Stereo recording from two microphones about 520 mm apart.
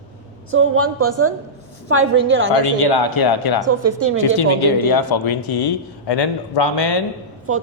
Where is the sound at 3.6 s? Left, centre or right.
Right.